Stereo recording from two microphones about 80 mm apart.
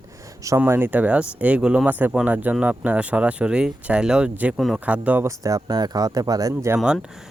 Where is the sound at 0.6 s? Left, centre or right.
Right; by 1.9 s centre.